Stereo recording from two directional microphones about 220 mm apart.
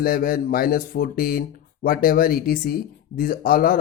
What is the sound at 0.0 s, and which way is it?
Speech, 40° left (ahead or behind).